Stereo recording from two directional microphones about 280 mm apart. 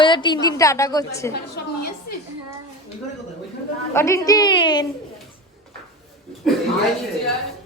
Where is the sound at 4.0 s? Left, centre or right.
Centre.